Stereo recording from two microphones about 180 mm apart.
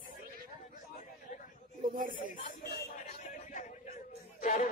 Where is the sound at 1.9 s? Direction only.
50° right (ahead or behind).